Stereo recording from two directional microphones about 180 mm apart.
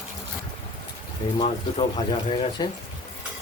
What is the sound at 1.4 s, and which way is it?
Speech, 30° left (ahead or behind).